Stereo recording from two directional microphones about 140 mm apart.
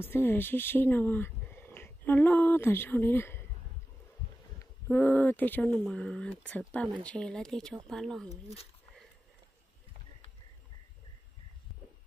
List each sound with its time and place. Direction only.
0.0 s speech: 15° left (ahead or behind)
4.8 s speech: 15° left (ahead or behind)